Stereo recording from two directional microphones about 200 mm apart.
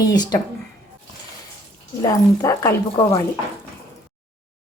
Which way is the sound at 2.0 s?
15° left (ahead or behind).